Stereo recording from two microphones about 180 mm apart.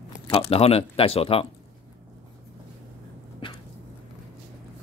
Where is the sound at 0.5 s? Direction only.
35° left (ahead or behind).